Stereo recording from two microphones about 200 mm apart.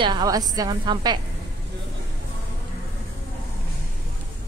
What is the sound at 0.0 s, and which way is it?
A woman's voice, 20° right (ahead or behind).